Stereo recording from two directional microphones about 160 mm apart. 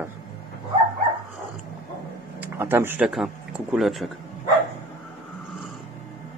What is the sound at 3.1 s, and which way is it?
Speech, centre (ahead or behind).